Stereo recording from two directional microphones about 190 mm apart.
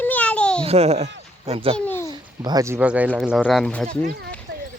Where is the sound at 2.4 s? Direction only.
15° right (ahead or behind).